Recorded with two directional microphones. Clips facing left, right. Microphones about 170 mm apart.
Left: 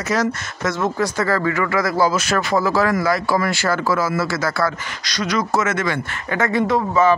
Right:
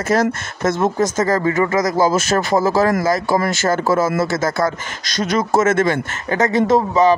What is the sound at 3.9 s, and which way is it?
Speech, 25° right (ahead or behind).